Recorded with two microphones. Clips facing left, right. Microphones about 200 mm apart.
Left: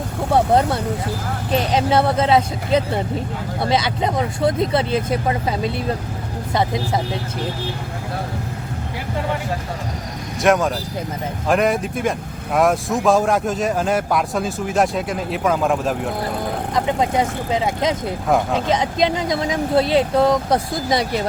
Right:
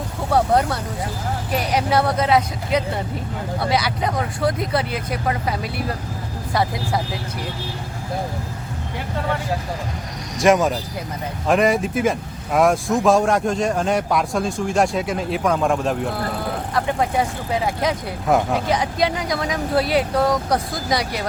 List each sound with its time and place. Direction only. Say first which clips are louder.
0.3 s vehicle: left 2 dB; 25° left (ahead or behind)
1.5 s speech: left 3 dB; 25° left (ahead or behind)
10.4 s speech: right 1 dB; centre (ahead or behind)
16.7 s speech: left 2 dB; 20° left (ahead or behind)